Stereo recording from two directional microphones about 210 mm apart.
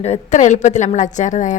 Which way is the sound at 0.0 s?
35° left (ahead or behind).